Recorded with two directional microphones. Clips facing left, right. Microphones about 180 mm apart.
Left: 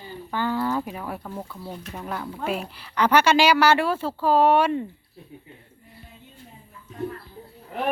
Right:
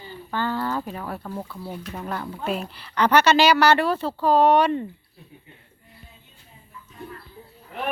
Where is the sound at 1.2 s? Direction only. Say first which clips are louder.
Right 2 dB; centre (ahead or behind).